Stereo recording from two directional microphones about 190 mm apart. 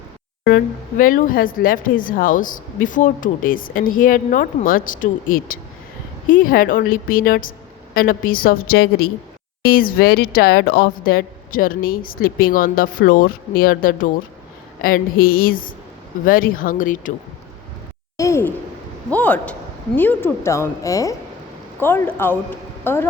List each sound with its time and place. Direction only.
0.4 s speech: 50° left (ahead or behind)
18.2 s speech: 15° left (ahead or behind)